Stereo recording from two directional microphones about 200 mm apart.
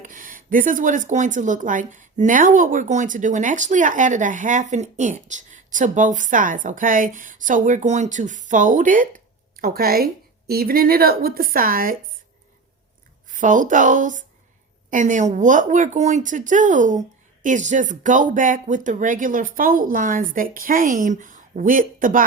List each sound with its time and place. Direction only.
0.0 s speech: 40° right (ahead or behind)
13.2 s speech: 40° right (ahead or behind)